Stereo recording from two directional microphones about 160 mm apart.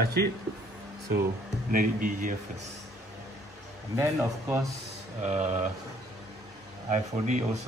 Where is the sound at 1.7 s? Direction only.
55° right (ahead or behind).